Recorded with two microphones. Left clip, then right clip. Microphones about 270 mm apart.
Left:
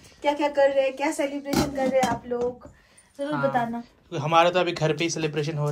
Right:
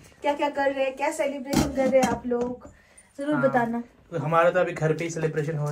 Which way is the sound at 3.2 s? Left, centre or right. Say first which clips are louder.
Right 2 dB; centre.